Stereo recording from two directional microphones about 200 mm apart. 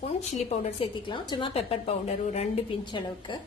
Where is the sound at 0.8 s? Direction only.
25° left (ahead or behind).